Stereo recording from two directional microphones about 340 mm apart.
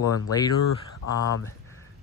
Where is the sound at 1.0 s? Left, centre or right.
Left.